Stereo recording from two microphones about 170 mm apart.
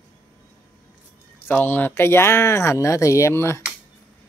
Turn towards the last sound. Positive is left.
turn(degrees=15)  # may be behind; listen again after turning